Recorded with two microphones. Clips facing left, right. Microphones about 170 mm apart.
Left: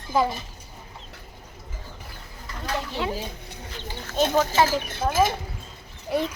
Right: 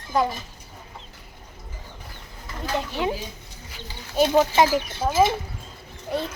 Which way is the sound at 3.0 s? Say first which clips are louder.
Right 4 dB; 20° right (ahead or behind).